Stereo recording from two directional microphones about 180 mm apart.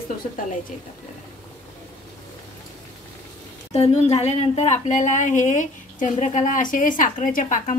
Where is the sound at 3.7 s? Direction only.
35° left (ahead or behind).